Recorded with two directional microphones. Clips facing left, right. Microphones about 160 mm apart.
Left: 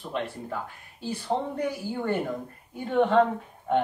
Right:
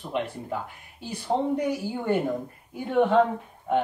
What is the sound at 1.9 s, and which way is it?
Speech, 10° right (ahead or behind).